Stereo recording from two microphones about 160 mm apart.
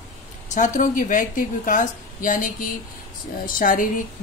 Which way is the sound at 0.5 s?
55° left (ahead or behind).